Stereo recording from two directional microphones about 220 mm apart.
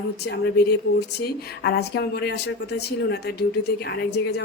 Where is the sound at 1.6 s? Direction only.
45° left (ahead or behind).